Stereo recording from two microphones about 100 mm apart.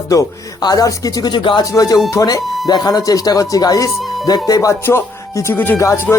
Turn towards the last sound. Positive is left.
turn(degrees=30)  # may be behind; listen again after turning